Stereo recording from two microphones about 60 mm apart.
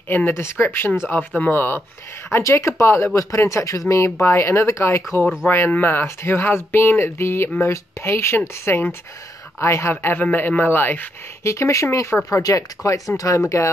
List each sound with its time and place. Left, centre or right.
0.1 s speech: left
10.1 s speech: left
11.4 s speech: left
12.3 s speech: left